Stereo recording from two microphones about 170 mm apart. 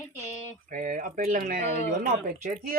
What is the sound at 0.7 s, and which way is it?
Speech, 50° right (ahead or behind).